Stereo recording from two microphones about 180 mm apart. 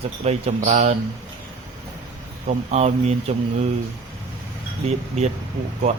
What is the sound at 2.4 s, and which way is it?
Speech, 40° right (ahead or behind).